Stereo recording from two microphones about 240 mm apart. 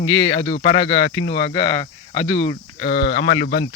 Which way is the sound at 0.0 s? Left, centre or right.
Left.